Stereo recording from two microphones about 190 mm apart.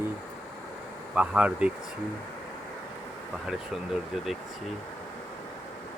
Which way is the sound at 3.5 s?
Centre (ahead or behind).